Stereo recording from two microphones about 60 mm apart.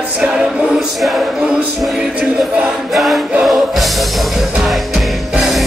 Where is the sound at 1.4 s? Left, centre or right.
Centre.